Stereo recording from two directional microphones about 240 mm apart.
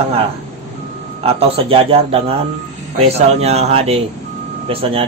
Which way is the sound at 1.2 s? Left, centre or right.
Right.